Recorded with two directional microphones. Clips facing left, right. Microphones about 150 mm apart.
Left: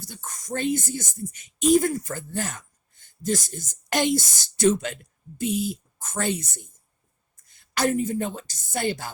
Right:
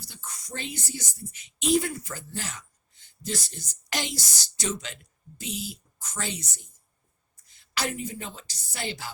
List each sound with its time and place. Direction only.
0.0 s a woman's voice: 50° left (ahead or behind)